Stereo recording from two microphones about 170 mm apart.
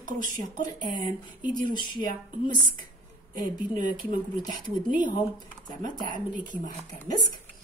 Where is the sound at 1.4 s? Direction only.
50° right (ahead or behind).